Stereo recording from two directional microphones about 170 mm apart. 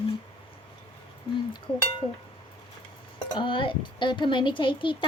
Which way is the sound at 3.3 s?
30° left (ahead or behind).